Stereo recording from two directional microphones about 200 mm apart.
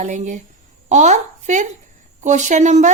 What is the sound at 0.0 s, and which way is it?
Speech, 35° right (ahead or behind).